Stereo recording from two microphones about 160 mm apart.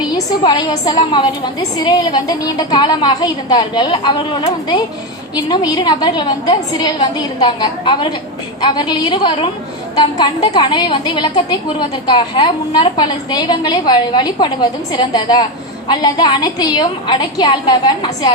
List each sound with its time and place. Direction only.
0.4 s a woman's voice: 25° left (ahead or behind)